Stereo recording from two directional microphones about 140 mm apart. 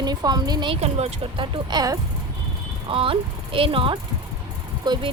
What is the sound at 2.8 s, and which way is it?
Speech, 40° right (ahead or behind).